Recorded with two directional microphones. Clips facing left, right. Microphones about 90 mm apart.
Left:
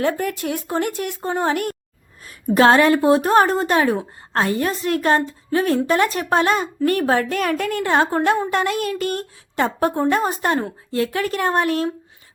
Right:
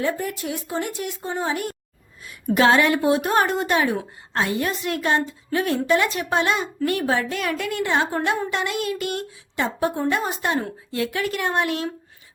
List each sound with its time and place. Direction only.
0.0 s speech: 65° left (ahead or behind)
2.2 s a woman's voice: 40° left (ahead or behind)